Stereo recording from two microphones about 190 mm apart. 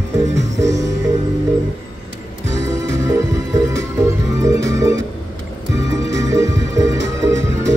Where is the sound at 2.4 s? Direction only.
15° right (ahead or behind).